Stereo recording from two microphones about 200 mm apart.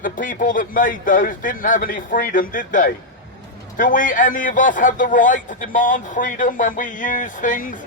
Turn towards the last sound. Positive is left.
turn(degrees=40)  # may be behind; listen again after turning